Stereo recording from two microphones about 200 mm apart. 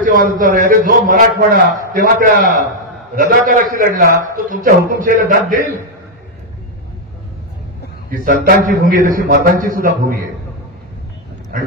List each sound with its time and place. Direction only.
0.0 s a man's voice: 45° right (ahead or behind)
8.1 s a man's voice: 45° right (ahead or behind)
11.5 s speech: 45° right (ahead or behind)